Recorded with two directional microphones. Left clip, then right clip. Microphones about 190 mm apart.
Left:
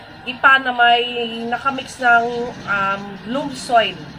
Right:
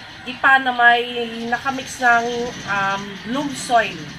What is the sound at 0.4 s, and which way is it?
Speech, 5° left (ahead or behind).